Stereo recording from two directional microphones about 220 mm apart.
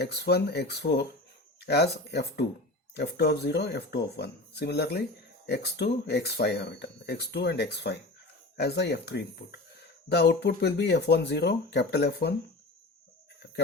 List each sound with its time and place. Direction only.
0.0 s speech: 45° left (ahead or behind)